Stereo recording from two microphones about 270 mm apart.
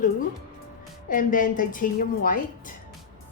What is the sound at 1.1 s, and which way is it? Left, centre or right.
A woman's voice, left.